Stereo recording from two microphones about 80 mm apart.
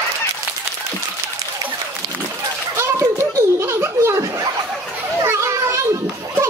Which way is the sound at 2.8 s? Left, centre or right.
Right.